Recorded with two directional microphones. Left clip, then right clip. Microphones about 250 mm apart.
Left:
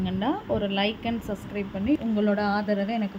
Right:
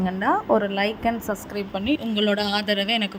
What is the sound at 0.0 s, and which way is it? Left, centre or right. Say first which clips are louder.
A woman's voice: right 7 dB; centre.